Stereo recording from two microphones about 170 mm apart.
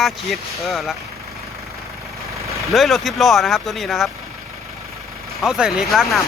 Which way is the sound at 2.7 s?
Centre (ahead or behind).